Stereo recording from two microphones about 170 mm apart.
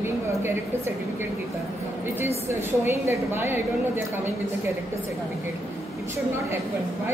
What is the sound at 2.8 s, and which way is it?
A woman's voice, 15° right (ahead or behind).